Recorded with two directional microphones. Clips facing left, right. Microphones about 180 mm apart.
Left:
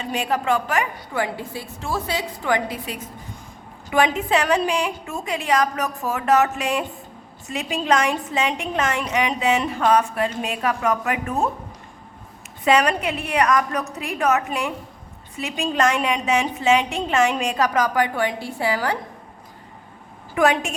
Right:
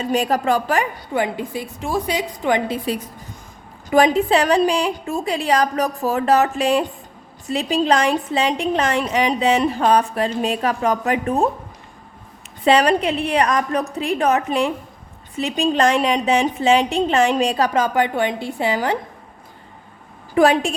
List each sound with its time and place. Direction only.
0.0 s a woman's voice: 40° right (ahead or behind)
1.1 s a woman's voice: 20° right (ahead or behind)
12.6 s a woman's voice: 30° right (ahead or behind)
20.3 s a woman's voice: 35° right (ahead or behind)